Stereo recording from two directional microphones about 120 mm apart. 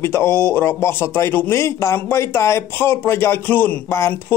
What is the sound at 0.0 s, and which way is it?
Speech, 20° left (ahead or behind).